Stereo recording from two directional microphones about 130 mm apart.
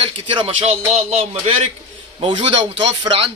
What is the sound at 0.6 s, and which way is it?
Speech, 55° right (ahead or behind).